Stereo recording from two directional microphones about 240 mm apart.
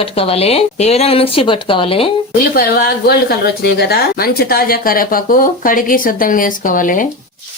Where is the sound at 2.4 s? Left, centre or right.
Left.